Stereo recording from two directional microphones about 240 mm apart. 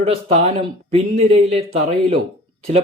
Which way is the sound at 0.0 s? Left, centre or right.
Right.